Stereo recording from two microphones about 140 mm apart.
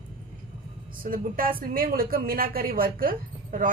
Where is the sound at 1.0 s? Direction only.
90° right.